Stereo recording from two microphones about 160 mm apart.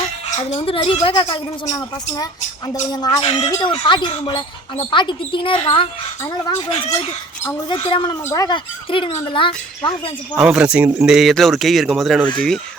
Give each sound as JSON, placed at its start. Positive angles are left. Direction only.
{"t": 0.3, "sound": "speech", "side_deg": 40}
{"t": 2.9, "sound": "speech", "side_deg": 25}
{"t": 3.2, "sound": "speech", "side_deg": 40}
{"t": 6.5, "sound": "speech", "side_deg": 45}
{"t": 7.7, "sound": "speech", "side_deg": 30}
{"t": 10.3, "sound": "speech", "side_deg": -5}